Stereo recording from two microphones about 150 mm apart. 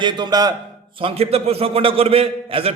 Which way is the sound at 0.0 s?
30° right (ahead or behind).